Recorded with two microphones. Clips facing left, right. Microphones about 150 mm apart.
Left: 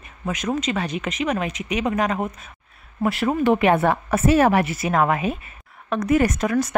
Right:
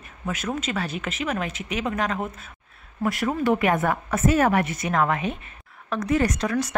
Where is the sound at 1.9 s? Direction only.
10° left (ahead or behind).